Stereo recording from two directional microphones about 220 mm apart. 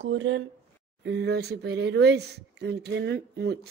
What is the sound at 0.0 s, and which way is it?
Speech, 55° right (ahead or behind).